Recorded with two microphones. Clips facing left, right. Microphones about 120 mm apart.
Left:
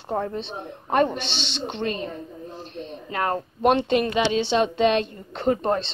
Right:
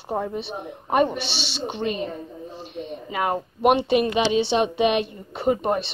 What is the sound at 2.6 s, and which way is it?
Speech, 5° right (ahead or behind).